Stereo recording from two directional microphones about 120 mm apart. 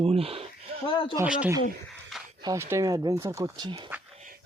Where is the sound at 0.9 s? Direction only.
45° left (ahead or behind).